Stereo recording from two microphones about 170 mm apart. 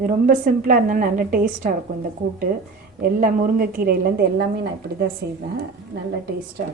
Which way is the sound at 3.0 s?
60° right (ahead or behind).